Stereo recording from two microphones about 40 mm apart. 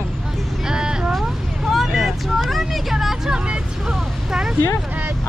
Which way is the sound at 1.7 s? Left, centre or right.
Centre.